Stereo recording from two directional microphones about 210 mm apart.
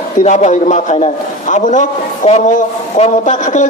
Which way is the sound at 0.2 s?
35° left (ahead or behind).